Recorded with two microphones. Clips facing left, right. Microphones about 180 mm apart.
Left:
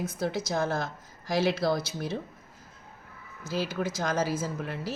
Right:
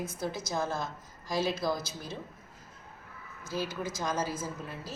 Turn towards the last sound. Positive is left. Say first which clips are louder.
# left 6 dB
turn(degrees=75)  # may be behind; listen again after turning